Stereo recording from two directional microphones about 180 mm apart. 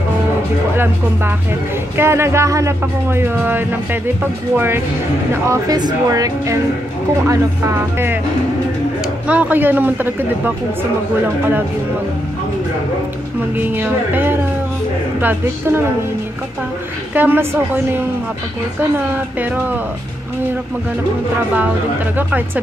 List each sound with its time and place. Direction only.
2.0 s speech: 15° right (ahead or behind)
9.3 s speech: 10° right (ahead or behind)
13.6 s speech: 10° right (ahead or behind)
17.1 s speech: 10° right (ahead or behind)